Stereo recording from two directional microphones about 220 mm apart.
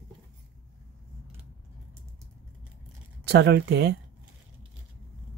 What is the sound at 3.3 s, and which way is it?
Speech, 50° right (ahead or behind).